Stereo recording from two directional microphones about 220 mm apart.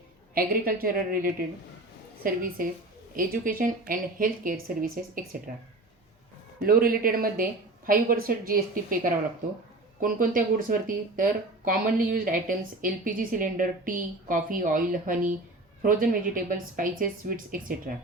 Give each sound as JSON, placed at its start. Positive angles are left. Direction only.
{"t": 0.3, "sound": "a woman's voice", "side_deg": -40}
{"t": 6.6, "sound": "a woman's voice", "side_deg": -40}